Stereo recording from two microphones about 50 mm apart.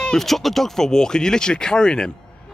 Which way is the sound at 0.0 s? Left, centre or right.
Centre.